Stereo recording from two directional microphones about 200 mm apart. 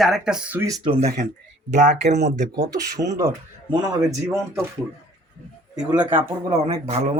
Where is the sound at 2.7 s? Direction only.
15° right (ahead or behind).